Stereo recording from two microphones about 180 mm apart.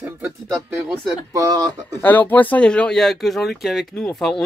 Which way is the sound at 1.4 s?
20° right (ahead or behind).